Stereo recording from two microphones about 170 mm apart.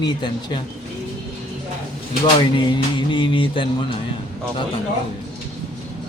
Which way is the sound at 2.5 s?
25° left (ahead or behind).